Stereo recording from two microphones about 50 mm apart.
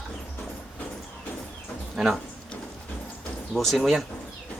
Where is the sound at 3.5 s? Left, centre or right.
Centre.